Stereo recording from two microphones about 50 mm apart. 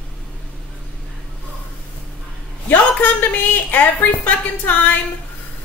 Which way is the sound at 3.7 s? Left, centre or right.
Left.